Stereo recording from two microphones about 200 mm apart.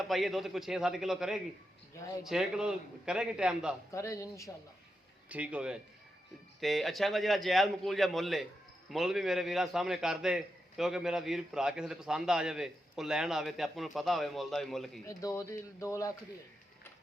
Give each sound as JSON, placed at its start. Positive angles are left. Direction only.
{"t": 0.1, "sound": "a man's voice", "side_deg": 0}
{"t": 3.9, "sound": "speech", "side_deg": 15}
{"t": 5.3, "sound": "a man's voice", "side_deg": -5}
{"t": 15.0, "sound": "speech", "side_deg": 15}